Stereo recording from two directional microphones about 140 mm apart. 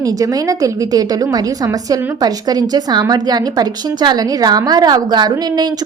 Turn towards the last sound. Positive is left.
turn(degrees=-30)  # may be behind; listen again after turning